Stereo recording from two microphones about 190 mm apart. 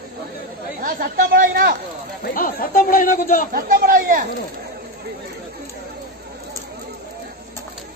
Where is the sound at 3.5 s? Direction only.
50° right (ahead or behind).